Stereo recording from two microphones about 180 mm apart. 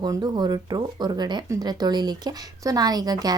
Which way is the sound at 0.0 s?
25° right (ahead or behind).